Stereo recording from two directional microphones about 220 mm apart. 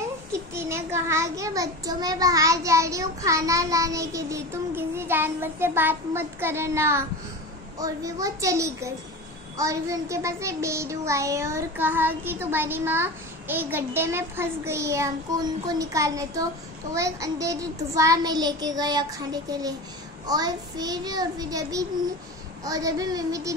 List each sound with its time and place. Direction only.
0.3 s a child's voice: 10° right (ahead or behind)